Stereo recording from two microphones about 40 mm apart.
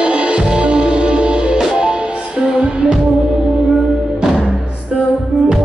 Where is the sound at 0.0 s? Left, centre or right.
Right.